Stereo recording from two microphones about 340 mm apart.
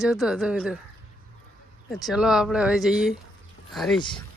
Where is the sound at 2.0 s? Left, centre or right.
Centre.